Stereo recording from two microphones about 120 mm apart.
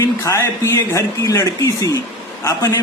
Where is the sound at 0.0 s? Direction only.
25° left (ahead or behind).